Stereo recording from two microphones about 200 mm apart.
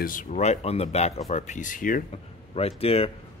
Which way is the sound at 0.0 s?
40° left (ahead or behind).